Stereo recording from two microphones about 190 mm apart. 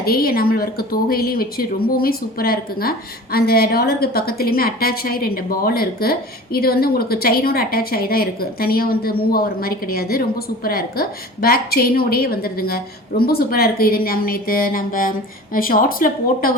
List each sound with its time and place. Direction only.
0.0 s a woman's voice: 50° left (ahead or behind)